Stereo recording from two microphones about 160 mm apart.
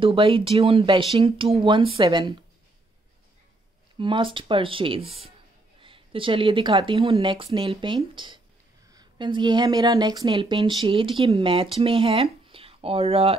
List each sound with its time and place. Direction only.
0.0 s speech: 35° right (ahead or behind)
4.0 s speech: 30° right (ahead or behind)